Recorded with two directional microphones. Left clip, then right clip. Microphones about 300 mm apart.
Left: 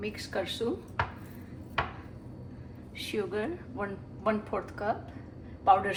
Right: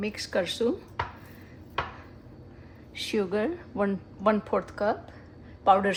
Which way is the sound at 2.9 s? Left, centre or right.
Right.